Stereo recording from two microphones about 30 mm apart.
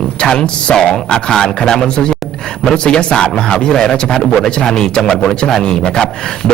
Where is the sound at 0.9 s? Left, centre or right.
Left.